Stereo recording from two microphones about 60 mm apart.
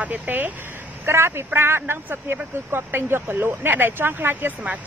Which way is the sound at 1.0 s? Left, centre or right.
Right.